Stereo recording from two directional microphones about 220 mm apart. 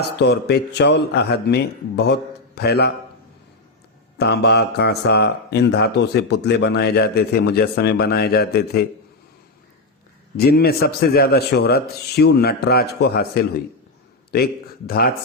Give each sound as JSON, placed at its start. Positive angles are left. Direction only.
{"t": 0.2, "sound": "a man's voice", "side_deg": 50}
{"t": 4.2, "sound": "a man's voice", "side_deg": 50}
{"t": 10.3, "sound": "a man's voice", "side_deg": 45}